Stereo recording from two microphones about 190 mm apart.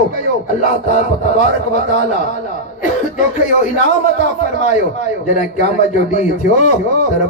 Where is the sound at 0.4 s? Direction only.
40° left (ahead or behind).